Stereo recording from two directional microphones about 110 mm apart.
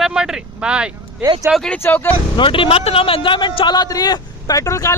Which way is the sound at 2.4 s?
50° left (ahead or behind).